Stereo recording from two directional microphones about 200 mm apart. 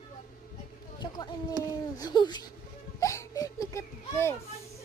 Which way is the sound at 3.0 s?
15° left (ahead or behind).